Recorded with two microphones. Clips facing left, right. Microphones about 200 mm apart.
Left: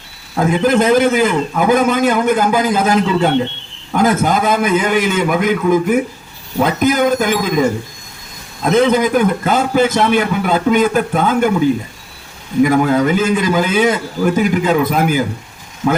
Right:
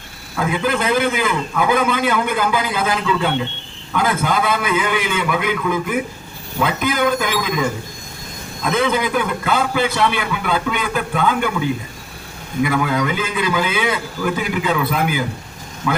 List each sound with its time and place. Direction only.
0.3 s a man's voice: 40° left (ahead or behind)